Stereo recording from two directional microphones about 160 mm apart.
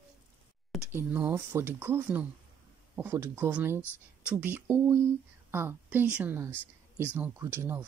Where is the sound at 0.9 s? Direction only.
15° right (ahead or behind).